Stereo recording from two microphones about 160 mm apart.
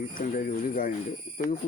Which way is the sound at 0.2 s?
55° left (ahead or behind).